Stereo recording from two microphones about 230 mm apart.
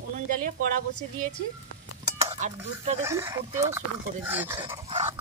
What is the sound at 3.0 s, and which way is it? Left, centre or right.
Speech, centre.